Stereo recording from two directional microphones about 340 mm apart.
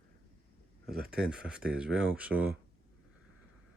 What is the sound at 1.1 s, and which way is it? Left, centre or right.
Speech, centre.